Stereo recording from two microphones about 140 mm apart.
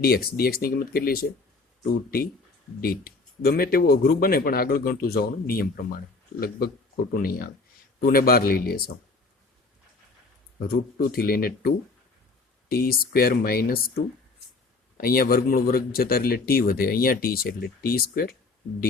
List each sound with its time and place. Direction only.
0.0 s a man's voice: 90° left
10.6 s a man's voice: 90° left
15.0 s a man's voice: 90° left